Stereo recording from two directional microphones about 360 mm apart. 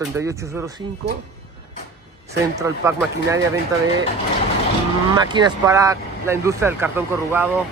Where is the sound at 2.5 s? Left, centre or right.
Centre.